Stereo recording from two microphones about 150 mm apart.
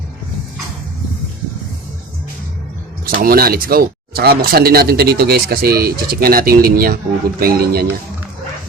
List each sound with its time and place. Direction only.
3.2 s speech: 80° right